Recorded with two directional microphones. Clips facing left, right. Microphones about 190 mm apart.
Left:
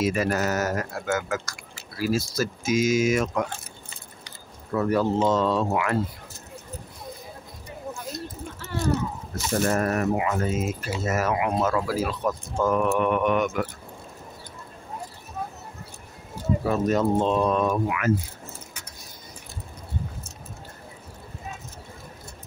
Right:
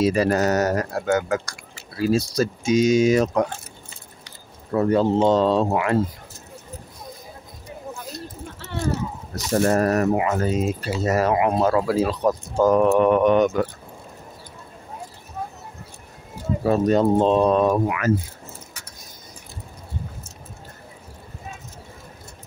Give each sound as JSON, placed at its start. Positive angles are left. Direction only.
{"t": 0.0, "sound": "speech", "side_deg": -30}
{"t": 4.7, "sound": "speech", "side_deg": -30}
{"t": 9.3, "sound": "speech", "side_deg": -35}
{"t": 16.6, "sound": "speech", "side_deg": -35}